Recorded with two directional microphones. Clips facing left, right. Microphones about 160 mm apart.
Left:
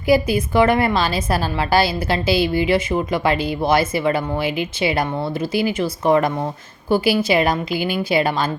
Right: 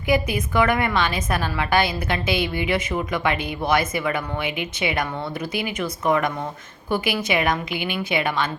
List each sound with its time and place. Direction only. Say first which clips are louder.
0.1 s a woman's voice: left 5 dB; 30° left (ahead or behind)